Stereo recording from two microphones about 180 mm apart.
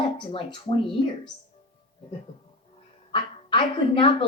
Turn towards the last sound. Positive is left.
turn(degrees=30)  # may be behind; listen again after turning